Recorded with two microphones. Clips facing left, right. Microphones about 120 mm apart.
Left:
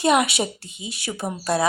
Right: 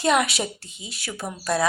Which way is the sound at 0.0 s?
20° left (ahead or behind).